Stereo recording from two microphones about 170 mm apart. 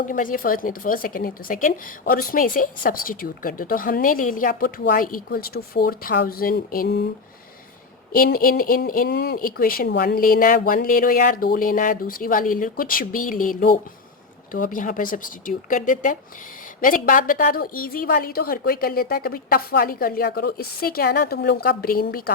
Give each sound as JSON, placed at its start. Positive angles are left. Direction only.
{"t": 0.0, "sound": "speech", "side_deg": 50}
{"t": 8.1, "sound": "speech", "side_deg": 60}